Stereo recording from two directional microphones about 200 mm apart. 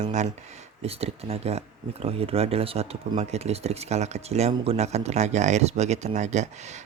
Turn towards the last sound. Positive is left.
turn(degrees=-35)  # may be behind; listen again after turning